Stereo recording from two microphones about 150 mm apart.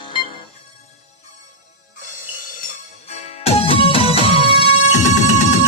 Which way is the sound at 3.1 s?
40° left (ahead or behind).